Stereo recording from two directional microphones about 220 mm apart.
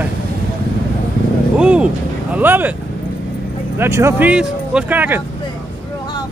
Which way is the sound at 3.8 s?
10° right (ahead or behind).